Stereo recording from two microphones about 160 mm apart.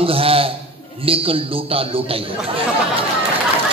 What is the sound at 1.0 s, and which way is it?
A man's voice, 35° right (ahead or behind).